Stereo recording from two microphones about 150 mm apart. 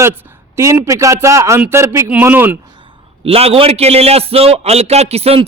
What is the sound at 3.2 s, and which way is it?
A man's voice, 40° right (ahead or behind).